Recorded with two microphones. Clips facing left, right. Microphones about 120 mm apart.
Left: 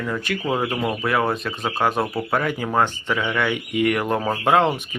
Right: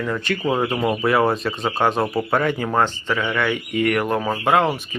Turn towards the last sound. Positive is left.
turn(degrees=20)  # may be behind; listen again after turning